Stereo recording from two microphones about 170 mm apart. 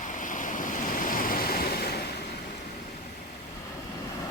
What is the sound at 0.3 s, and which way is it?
Waves, 50° left (ahead or behind).